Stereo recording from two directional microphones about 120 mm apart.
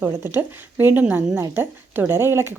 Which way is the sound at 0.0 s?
20° right (ahead or behind).